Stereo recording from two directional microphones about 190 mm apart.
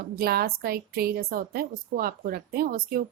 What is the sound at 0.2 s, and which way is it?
A woman's voice, 55° right (ahead or behind).